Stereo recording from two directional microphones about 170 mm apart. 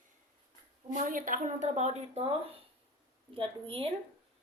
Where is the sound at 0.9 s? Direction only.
50° right (ahead or behind); by 3.9 s 30° right (ahead or behind).